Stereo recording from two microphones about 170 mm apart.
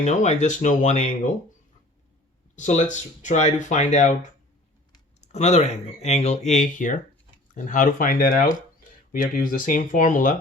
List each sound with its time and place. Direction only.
0.0 s speech: 40° left (ahead or behind)
2.6 s speech: 45° left (ahead or behind)